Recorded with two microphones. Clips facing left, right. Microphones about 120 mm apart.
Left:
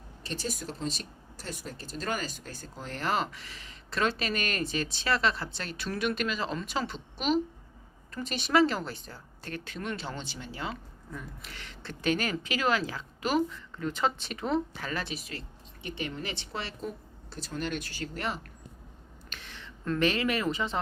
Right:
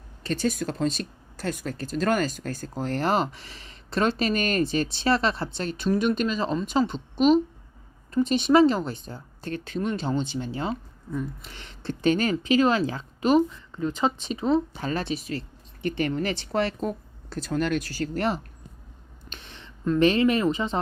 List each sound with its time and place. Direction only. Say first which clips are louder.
0.3 s a woman's voice: right 10 dB; 60° right (ahead or behind); by 14.8 s 15° right (ahead or behind)
14.8 s speech: right 7 dB; 30° right (ahead or behind)
16.0 s speech: right 9 dB; 50° right (ahead or behind)
19.3 s a sound: right 2 dB; 25° right (ahead or behind)
20.0 s a woman's voice: right 8 dB; 30° right (ahead or behind)